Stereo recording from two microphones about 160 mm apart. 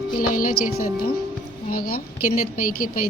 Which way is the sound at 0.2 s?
60° left (ahead or behind).